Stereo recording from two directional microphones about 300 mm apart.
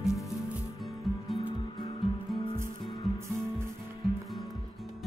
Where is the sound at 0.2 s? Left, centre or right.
Centre.